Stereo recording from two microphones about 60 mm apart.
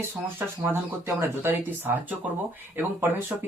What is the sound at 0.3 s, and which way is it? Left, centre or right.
Speech, right.